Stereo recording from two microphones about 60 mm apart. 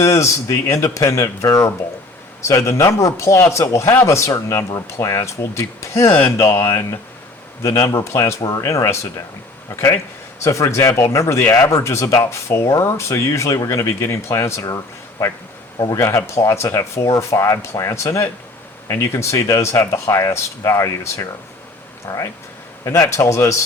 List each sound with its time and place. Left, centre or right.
0.0 s speech: left
6.1 s speech: left
6.3 s speech: left
8.4 s speech: left
13.6 s speech: left
14.0 s speech: left
16.0 s speech: left
17.0 s speech: left